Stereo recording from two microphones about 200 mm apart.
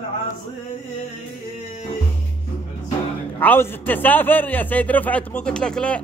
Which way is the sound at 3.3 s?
10° left (ahead or behind).